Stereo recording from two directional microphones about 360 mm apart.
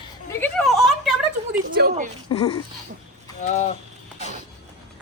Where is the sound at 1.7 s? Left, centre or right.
Right.